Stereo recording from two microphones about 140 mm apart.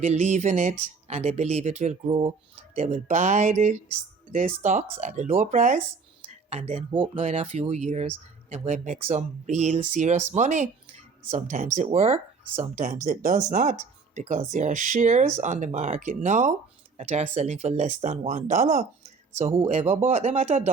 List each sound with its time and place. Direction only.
0.0 s speech: 55° right (ahead or behind)
2.8 s speech: 55° right (ahead or behind)
13.1 s speech: 65° right (ahead or behind)
17.0 s speech: 50° right (ahead or behind)
19.5 s speech: 45° right (ahead or behind)